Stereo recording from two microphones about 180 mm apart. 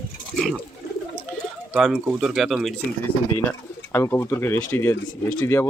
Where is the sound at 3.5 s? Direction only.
15° left (ahead or behind).